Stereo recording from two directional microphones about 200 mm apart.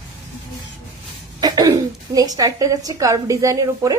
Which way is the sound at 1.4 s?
20° right (ahead or behind).